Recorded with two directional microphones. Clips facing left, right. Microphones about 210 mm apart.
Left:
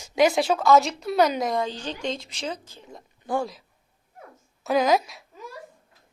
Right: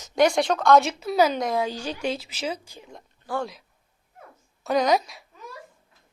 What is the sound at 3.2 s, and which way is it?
Speech, 15° left (ahead or behind).